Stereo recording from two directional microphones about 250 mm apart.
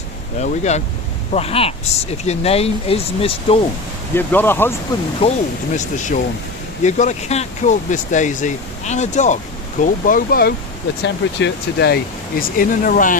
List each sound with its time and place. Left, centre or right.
0.3 s speech: left
4.1 s speech: centre
5.7 s speech: left
12.4 s speech: left